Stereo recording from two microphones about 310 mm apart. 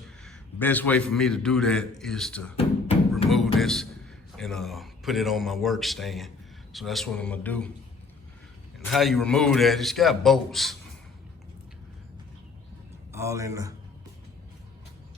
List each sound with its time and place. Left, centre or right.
0.3 s a man's voice: centre
2.6 s music: centre
3.2 s a man's voice: centre
8.9 s a man's voice: centre
13.1 s a man's voice: centre